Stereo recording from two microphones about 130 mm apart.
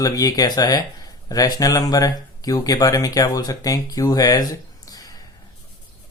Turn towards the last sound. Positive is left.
turn(degrees=30)  # may be behind; listen again after turning